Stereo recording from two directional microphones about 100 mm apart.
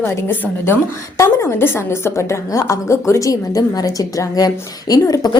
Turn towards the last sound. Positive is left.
turn(degrees=35)  # may be behind; listen again after turning